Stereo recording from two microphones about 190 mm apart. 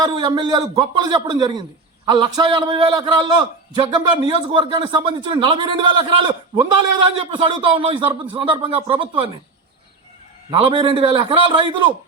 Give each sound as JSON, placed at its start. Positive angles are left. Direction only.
{"t": 0.0, "sound": "a man's voice", "side_deg": -25}
{"t": 10.5, "sound": "a man's voice", "side_deg": -25}